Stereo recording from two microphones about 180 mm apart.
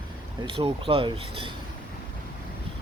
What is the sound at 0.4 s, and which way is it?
Speech, 30° right (ahead or behind).